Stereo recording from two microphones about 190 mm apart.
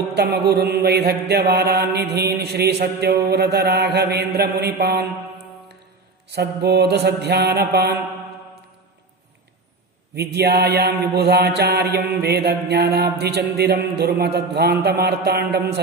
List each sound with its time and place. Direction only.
0.1 s music: 55° right (ahead or behind)
6.3 s music: 60° right (ahead or behind)
10.1 s music: 60° right (ahead or behind)